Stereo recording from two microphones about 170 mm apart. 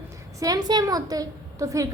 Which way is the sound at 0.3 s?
20° right (ahead or behind).